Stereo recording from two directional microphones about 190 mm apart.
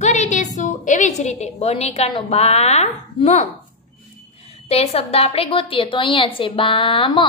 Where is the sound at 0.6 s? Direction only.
40° left (ahead or behind).